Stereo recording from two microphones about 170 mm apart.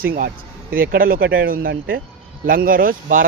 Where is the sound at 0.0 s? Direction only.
60° right (ahead or behind).